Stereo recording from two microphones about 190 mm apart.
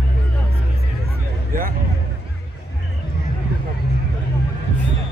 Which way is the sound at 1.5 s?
45° right (ahead or behind).